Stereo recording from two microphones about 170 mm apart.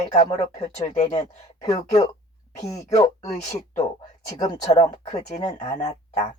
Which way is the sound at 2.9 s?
20° left (ahead or behind).